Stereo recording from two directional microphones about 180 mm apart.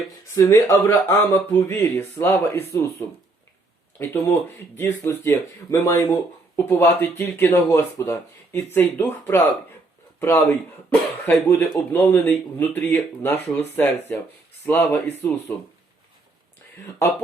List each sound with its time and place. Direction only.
0.3 s speech: 15° left (ahead or behind)
3.9 s speech: 10° left (ahead or behind)
14.7 s speech: 10° left (ahead or behind)